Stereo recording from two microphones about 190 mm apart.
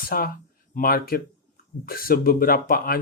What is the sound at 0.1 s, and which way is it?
Speech, 50° left (ahead or behind).